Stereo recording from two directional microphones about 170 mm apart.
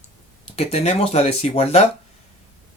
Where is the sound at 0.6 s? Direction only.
35° left (ahead or behind).